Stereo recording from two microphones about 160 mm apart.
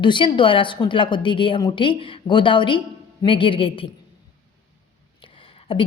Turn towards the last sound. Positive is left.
turn(degrees=35)  # may be behind; listen again after turning